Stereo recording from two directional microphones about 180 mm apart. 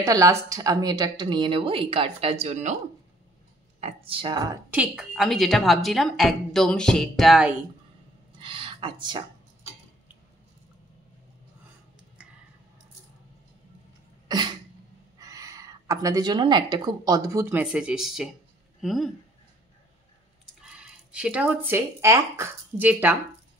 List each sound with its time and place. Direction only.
0.0 s a woman's voice: 15° right (ahead or behind); by 2.8 s 40° right (ahead or behind)
3.8 s a woman's voice: 30° right (ahead or behind)
4.6 s a woman's voice: 5° right (ahead or behind)
8.4 s a sound: 30° right (ahead or behind)
14.2 s cough: 25° right (ahead or behind)
15.1 s a woman's voice: 20° right (ahead or behind); by 19.1 s centre (ahead or behind)
20.6 s speech: 5° right (ahead or behind)